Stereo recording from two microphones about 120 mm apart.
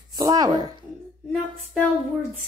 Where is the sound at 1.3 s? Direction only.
5° left (ahead or behind).